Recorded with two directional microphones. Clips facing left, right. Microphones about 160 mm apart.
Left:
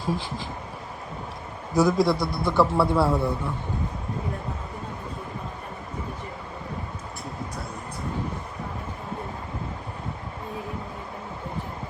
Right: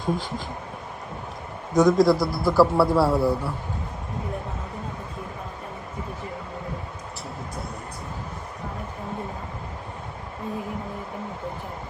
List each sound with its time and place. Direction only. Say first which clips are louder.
0.0 s a man's voice: right 2 dB; centre (ahead or behind)
1.8 s a man's voice: right 3 dB; centre (ahead or behind)